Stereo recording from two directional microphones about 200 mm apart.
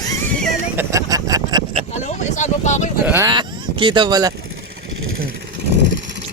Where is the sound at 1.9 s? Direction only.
35° left (ahead or behind).